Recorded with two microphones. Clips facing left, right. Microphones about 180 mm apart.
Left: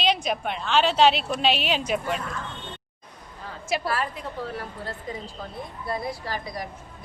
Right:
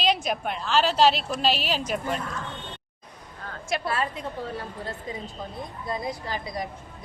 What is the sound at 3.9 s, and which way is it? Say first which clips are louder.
Speech: even; 25° right (ahead or behind).